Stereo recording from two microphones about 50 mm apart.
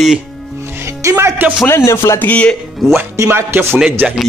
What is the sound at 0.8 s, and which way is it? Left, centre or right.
Music, right.